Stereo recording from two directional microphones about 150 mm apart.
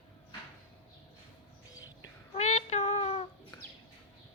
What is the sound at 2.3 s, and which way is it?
Child singing, 50° left (ahead or behind).